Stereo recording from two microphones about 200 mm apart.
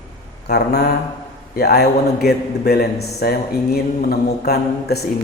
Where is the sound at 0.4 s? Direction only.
55° left (ahead or behind).